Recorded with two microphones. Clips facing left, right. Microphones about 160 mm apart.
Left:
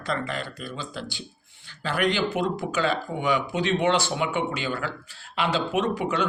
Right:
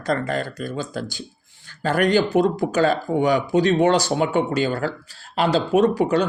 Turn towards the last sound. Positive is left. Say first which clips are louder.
# right 8 dB
turn(degrees=-40)  # may be behind; listen again after turning